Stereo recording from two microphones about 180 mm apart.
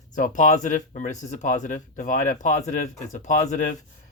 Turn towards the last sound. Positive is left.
turn(degrees=40)  # may be behind; listen again after turning